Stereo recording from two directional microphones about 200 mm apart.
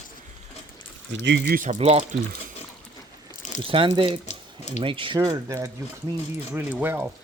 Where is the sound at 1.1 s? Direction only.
65° right (ahead or behind).